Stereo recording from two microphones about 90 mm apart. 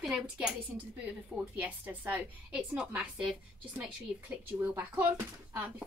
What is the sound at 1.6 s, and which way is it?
A woman's voice, 20° right (ahead or behind).